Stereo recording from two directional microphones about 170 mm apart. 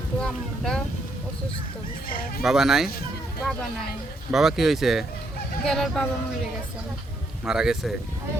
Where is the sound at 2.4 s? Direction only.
Centre (ahead or behind).